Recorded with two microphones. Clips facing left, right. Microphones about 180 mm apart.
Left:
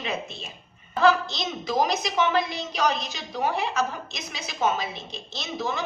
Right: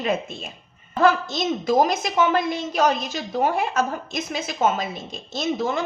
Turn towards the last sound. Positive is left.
turn(degrees=-50)  # may be behind; listen again after turning